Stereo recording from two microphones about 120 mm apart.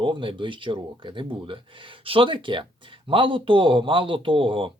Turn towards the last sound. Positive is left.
turn(degrees=-45)  # may be behind; listen again after turning